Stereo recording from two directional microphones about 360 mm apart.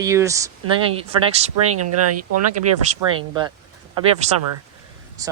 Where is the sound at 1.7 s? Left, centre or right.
Right.